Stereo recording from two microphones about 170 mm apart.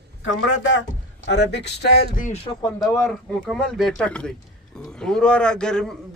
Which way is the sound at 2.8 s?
5° left (ahead or behind).